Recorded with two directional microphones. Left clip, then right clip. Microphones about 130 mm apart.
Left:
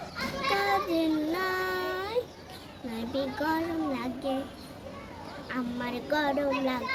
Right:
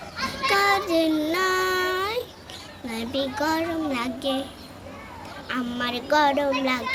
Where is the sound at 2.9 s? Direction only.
20° left (ahead or behind).